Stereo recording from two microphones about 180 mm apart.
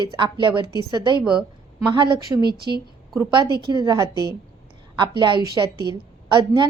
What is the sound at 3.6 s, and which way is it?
A woman's voice, 25° right (ahead or behind).